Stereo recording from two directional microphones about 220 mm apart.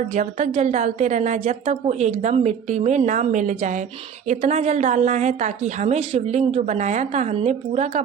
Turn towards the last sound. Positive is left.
turn(degrees=-30)  # may be behind; listen again after turning